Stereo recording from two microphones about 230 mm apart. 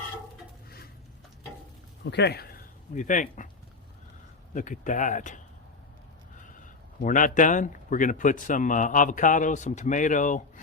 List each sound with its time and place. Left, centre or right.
2.0 s speech: left
4.5 s a man's voice: left
6.5 s a man's voice: left